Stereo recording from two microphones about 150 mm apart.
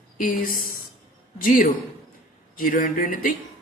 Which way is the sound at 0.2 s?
65° left (ahead or behind).